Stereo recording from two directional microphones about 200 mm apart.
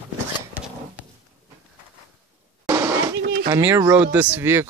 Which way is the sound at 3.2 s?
55° right (ahead or behind).